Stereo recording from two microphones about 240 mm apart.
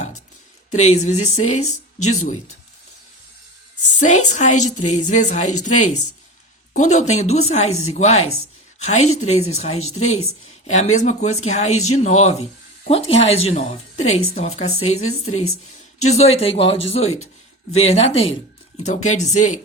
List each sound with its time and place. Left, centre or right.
0.7 s speech: left
4.0 s speech: left